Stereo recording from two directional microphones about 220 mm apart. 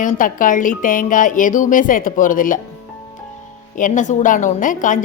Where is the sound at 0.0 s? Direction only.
35° left (ahead or behind).